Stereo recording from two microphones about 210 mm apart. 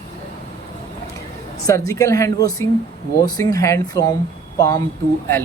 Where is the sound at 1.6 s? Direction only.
15° left (ahead or behind).